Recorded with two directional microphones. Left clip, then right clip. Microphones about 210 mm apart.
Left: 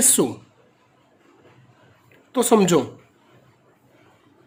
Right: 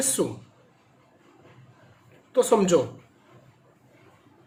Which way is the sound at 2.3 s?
50° left (ahead or behind).